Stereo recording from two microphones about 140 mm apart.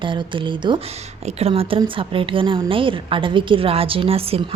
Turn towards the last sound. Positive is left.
turn(degrees=-45)  # may be behind; listen again after turning